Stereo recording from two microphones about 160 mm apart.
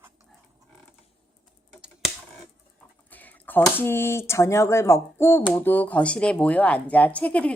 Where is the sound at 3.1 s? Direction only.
10° left (ahead or behind).